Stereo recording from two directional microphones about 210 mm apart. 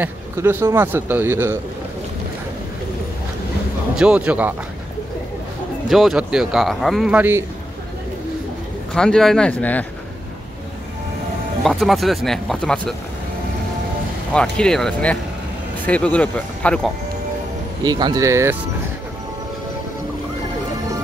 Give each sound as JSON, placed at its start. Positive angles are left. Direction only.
{"t": 0.0, "sound": "a man's voice", "side_deg": -10}
{"t": 3.9, "sound": "a man's voice", "side_deg": -5}
{"t": 5.9, "sound": "speech", "side_deg": 0}
{"t": 8.9, "sound": "speech", "side_deg": 5}
{"t": 11.6, "sound": "speech", "side_deg": 0}
{"t": 14.3, "sound": "speech", "side_deg": 5}
{"t": 17.8, "sound": "a man's voice", "side_deg": -20}